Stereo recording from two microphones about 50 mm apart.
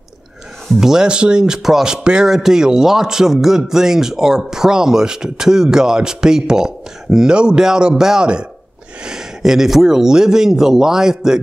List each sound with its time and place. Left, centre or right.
0.7 s a man's voice: centre